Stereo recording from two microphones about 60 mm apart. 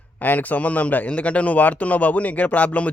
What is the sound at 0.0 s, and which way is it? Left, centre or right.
A man's voice, left.